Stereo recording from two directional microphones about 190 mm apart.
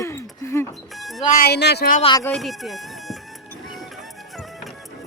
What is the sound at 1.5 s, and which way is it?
Speech, 60° left (ahead or behind).